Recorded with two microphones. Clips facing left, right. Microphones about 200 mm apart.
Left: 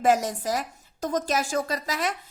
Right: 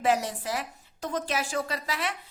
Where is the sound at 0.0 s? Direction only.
45° left (ahead or behind).